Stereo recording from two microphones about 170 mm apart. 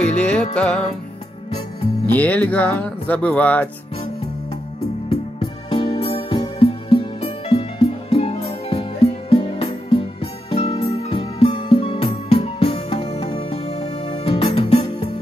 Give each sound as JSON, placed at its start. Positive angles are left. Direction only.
{"t": 0.0, "sound": "music", "side_deg": 5}
{"t": 2.0, "sound": "speech", "side_deg": 10}
{"t": 5.1, "sound": "music", "side_deg": 30}